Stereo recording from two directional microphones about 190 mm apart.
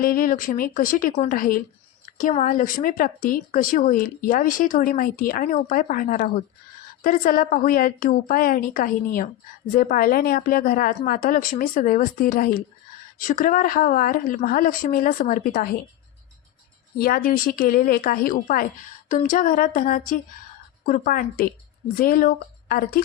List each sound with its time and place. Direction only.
0.0 s speech: 50° left (ahead or behind)
17.0 s speech: 50° left (ahead or behind)